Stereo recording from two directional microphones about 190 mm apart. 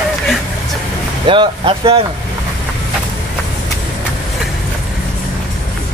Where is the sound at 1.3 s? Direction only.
25° right (ahead or behind).